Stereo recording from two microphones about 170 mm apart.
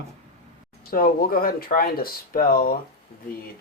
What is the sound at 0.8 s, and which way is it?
Speech, 60° left (ahead or behind).